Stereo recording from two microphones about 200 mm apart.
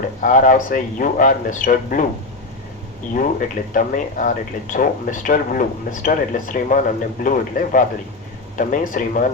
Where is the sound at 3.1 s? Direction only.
40° left (ahead or behind).